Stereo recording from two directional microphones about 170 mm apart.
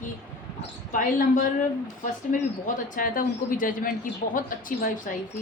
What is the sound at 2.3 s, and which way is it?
Speech, 50° left (ahead or behind).